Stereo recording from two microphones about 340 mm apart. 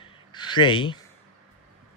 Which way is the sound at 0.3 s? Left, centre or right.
Centre.